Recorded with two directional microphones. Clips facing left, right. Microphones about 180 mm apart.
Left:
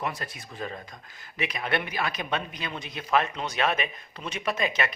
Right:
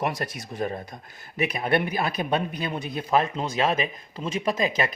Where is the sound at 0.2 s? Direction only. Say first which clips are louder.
Right 7 dB; 55° right (ahead or behind).